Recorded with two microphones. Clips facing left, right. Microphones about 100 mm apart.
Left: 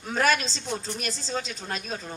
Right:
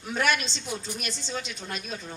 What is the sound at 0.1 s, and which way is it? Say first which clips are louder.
Speech: left 2 dB; 35° left (ahead or behind).